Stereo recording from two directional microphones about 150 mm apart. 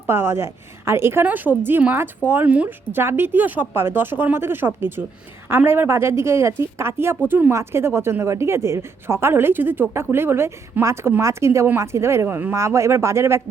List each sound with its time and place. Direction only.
0.1 s speech: 15° right (ahead or behind)